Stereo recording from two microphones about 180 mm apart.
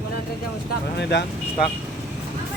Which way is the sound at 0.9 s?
70° left (ahead or behind).